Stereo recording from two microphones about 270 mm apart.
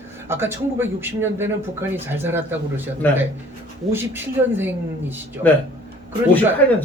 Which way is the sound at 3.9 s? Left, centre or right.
Centre.